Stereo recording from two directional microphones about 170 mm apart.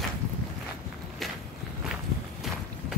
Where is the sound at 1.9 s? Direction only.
Centre (ahead or behind).